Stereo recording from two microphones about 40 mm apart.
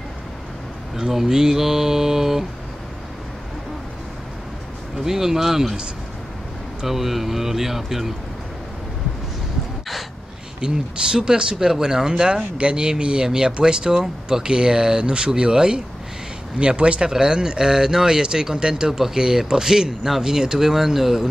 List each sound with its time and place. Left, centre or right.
0.9 s speech: centre
4.9 s speech: centre
6.8 s speech: centre
10.6 s speech: right
17.1 s speech: centre